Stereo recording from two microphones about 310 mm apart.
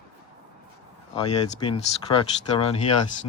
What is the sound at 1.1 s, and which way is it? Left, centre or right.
Speech, centre.